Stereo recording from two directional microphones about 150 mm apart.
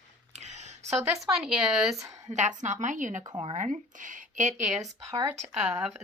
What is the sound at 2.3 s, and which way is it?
A woman's voice, 55° right (ahead or behind).